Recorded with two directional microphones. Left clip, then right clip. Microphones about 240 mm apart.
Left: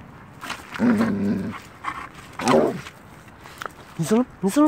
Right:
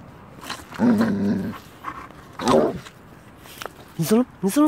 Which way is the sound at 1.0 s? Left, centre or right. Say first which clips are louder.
Right 1 dB; centre.